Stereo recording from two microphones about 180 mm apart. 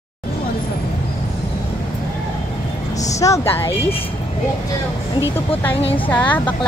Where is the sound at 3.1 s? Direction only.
15° left (ahead or behind).